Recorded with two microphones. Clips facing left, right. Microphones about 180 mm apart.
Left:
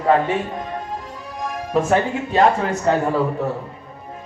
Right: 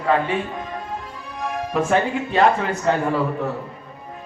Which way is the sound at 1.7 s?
40° left (ahead or behind).